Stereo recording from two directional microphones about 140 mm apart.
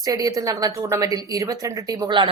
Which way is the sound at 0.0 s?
25° right (ahead or behind).